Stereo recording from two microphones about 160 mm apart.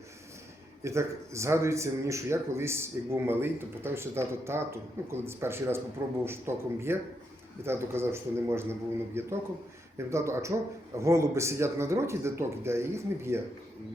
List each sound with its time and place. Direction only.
0.9 s speech: 20° right (ahead or behind)